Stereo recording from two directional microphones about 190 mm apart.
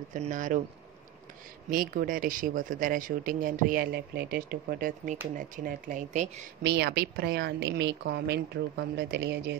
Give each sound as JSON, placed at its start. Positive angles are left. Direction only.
{"t": 0.1, "sound": "speech", "side_deg": -45}
{"t": 1.7, "sound": "speech", "side_deg": -45}
{"t": 6.6, "sound": "a woman's voice", "side_deg": -60}